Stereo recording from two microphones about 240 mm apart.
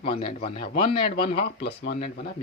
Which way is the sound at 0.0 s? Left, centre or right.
Left.